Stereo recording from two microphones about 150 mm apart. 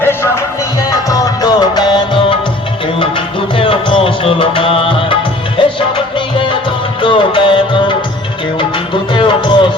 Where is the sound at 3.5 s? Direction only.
35° left (ahead or behind).